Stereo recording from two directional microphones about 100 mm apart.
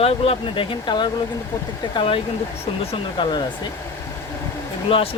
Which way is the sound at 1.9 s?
65° left (ahead or behind).